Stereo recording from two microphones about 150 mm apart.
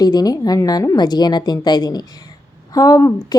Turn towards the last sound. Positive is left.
turn(degrees=20)  # may be behind; listen again after turning